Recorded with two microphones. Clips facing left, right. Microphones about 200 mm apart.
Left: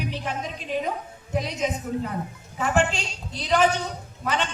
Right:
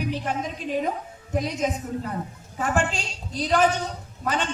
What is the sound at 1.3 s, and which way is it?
A woman's voice, 45° right (ahead or behind).